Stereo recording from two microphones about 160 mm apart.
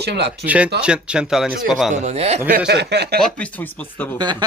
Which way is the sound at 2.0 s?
40° right (ahead or behind).